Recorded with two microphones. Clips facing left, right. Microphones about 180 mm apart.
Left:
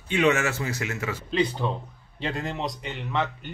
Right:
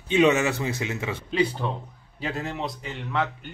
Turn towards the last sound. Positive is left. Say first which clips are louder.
# even
turn(degrees=0)  # may be behind; listen again after turning